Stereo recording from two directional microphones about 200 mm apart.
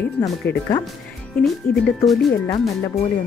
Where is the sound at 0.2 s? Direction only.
15° left (ahead or behind).